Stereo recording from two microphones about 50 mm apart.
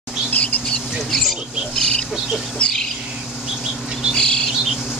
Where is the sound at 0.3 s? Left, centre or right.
Left.